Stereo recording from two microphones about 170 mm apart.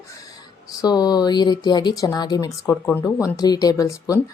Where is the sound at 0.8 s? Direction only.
25° left (ahead or behind).